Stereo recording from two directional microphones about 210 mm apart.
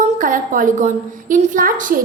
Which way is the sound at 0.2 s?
40° right (ahead or behind).